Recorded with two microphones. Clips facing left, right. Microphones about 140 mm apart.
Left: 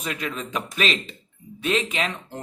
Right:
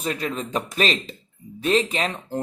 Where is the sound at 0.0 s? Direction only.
35° right (ahead or behind).